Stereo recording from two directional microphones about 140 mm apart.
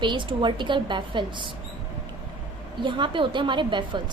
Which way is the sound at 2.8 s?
35° right (ahead or behind).